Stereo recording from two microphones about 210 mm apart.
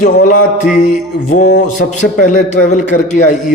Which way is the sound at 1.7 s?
40° left (ahead or behind).